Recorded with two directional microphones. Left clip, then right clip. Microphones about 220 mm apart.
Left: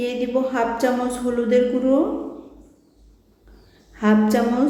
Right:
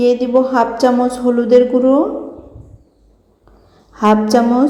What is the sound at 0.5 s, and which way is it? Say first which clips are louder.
A woman's voice: right 8 dB; 20° right (ahead or behind).